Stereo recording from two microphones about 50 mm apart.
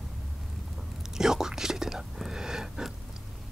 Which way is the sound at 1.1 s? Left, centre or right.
Centre.